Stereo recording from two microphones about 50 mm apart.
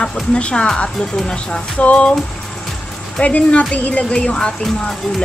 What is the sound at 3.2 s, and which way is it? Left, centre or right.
Speech, left.